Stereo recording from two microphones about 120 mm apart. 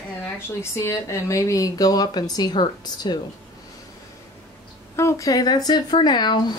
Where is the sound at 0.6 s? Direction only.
25° left (ahead or behind).